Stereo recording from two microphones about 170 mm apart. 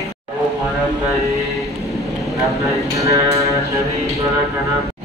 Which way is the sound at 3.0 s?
20° right (ahead or behind).